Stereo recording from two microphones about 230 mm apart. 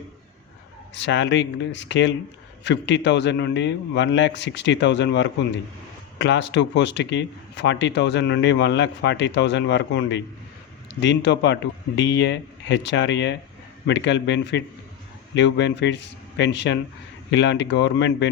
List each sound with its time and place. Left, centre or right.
0.9 s speech: left